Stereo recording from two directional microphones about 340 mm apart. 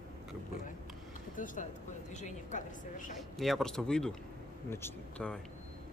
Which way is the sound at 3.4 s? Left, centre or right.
Centre.